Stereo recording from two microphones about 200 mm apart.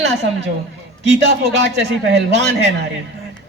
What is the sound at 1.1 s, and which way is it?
A woman's voice, 60° right (ahead or behind).